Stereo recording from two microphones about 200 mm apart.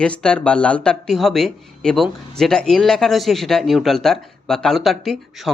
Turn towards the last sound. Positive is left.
turn(degrees=0)  # may be behind; listen again after turning